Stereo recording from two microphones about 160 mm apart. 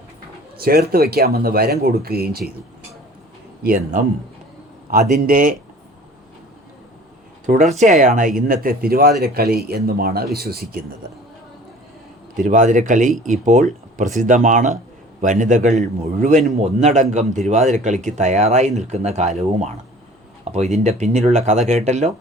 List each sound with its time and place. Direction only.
0.6 s speech: 70° right (ahead or behind)
3.6 s a man's voice: 65° right (ahead or behind)
7.4 s speech: 50° right (ahead or behind)
8.4 s speech: 65° right (ahead or behind)
12.5 s speech: 50° right (ahead or behind)